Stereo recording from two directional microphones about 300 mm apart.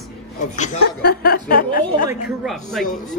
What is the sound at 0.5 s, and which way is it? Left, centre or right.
Speech, left.